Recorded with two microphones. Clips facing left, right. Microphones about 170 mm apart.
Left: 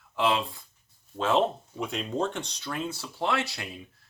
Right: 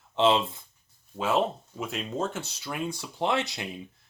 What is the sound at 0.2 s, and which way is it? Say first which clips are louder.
Speech: right 4 dB; 25° right (ahead or behind).